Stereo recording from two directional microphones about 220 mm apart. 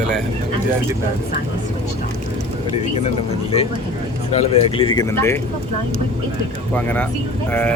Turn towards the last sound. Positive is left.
turn(degrees=10)  # may be behind; listen again after turning